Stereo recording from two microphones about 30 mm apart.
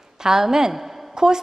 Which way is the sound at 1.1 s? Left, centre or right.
Right.